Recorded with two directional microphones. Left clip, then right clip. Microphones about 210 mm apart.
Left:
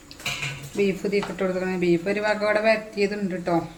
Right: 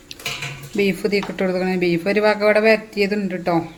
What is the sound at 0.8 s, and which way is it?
Speech, 50° right (ahead or behind).